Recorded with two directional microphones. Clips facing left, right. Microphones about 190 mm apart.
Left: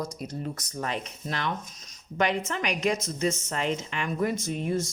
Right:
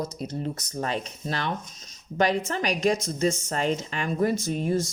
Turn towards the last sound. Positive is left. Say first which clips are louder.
# right 3 dB
turn(degrees=-35)  # may be behind; listen again after turning